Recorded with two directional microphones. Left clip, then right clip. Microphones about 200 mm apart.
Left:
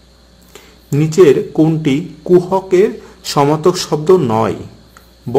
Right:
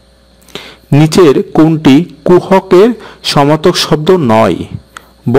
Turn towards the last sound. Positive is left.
turn(degrees=-50)  # may be behind; listen again after turning